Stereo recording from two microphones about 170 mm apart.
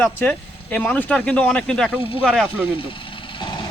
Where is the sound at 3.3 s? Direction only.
30° left (ahead or behind).